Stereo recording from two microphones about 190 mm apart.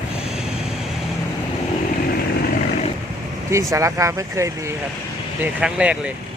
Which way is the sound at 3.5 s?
15° right (ahead or behind).